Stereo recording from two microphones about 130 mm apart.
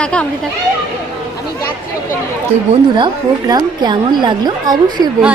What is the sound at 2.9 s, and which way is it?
A woman's voice, 35° right (ahead or behind).